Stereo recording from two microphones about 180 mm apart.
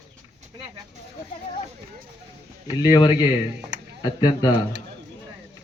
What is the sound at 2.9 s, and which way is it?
Speech, 20° left (ahead or behind).